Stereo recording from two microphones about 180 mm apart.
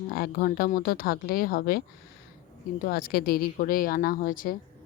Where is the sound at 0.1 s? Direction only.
55° left (ahead or behind).